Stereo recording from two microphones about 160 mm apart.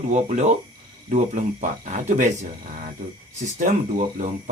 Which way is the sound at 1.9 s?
50° right (ahead or behind).